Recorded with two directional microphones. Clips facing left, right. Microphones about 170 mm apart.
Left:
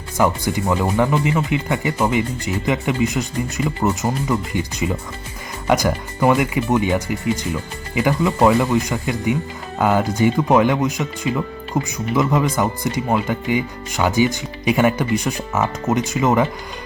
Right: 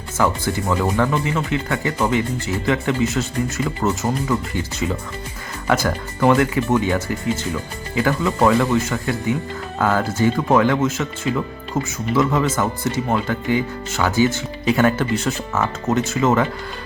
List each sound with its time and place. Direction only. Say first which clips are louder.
0.2 s speech: left 2 dB; 15° left (ahead or behind)